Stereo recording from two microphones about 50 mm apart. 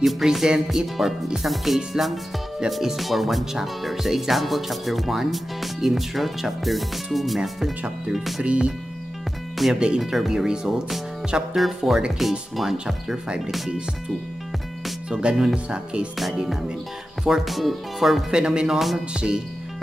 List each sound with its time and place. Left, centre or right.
0.0 s speech: centre
8.5 s speech: centre
9.8 s speech: centre
11.5 s speech: centre
12.7 s speech: centre
15.0 s speech: centre
17.2 s speech: centre
18.3 s speech: centre
18.8 s speech: centre
19.1 s speech: centre